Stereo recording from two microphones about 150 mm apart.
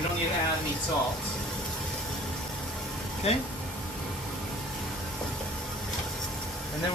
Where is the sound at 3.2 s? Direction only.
45° left (ahead or behind).